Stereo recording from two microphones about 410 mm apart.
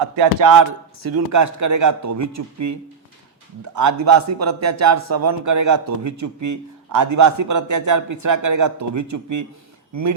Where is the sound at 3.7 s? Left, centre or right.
Right.